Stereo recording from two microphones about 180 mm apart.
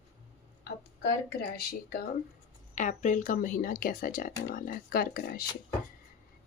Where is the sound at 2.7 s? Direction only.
45° left (ahead or behind).